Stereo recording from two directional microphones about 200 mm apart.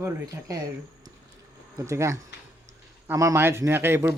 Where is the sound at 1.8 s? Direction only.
15° right (ahead or behind).